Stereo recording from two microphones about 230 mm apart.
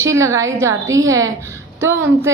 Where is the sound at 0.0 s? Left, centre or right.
Centre.